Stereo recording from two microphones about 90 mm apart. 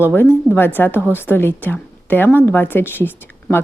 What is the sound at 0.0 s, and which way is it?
A woman's voice, 25° left (ahead or behind).